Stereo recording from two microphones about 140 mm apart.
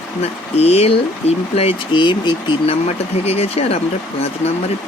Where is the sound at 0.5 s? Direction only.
45° left (ahead or behind).